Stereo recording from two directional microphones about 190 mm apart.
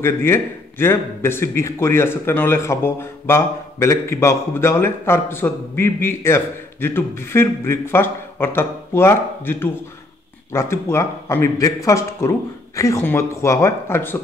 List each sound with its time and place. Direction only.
0.0 s speech: 10° left (ahead or behind)